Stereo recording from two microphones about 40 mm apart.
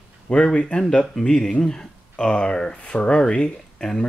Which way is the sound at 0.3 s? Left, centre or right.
Left.